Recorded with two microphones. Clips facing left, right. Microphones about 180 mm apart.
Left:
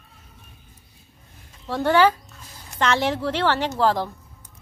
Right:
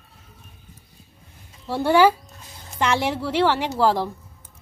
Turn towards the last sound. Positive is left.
turn(degrees=-5)  # may be behind; listen again after turning